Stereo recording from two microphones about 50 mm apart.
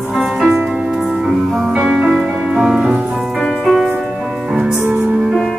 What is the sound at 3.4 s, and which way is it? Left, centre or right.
Music, centre.